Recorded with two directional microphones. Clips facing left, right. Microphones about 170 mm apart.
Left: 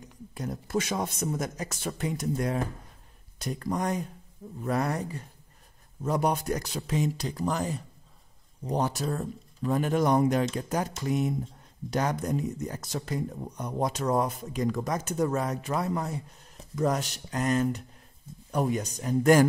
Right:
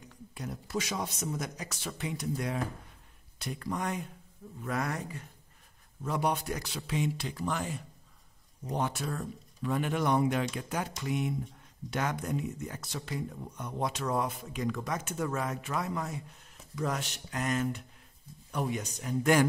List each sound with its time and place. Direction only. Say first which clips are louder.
0.3 s speech: left 5 dB; 45° left (ahead or behind)